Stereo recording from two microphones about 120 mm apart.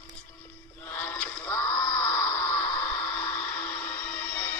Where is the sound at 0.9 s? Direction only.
15° left (ahead or behind).